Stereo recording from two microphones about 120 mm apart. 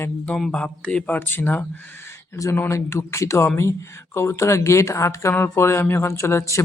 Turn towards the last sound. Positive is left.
turn(degrees=25)  # may be behind; listen again after turning